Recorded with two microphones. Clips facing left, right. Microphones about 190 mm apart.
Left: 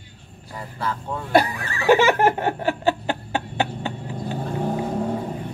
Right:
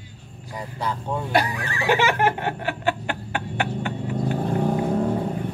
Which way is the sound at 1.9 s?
40° left (ahead or behind).